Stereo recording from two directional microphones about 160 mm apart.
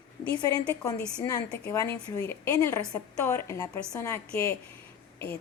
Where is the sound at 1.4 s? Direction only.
10° left (ahead or behind).